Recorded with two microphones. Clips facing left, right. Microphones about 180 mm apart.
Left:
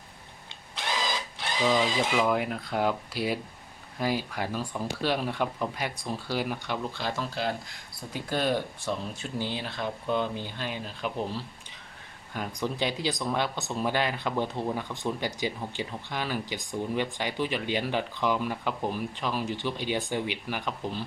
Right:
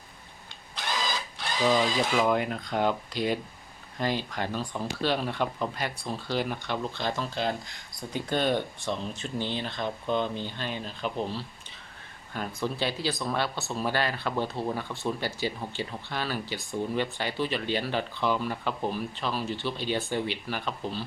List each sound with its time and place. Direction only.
1.6 s speech: centre (ahead or behind)